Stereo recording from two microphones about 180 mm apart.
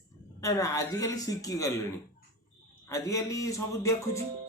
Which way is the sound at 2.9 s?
15° left (ahead or behind).